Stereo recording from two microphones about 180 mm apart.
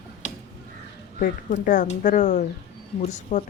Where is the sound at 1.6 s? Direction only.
45° left (ahead or behind).